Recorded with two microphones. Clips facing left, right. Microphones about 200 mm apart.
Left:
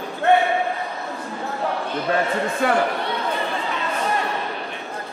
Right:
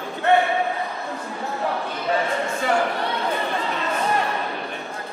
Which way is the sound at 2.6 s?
55° left (ahead or behind).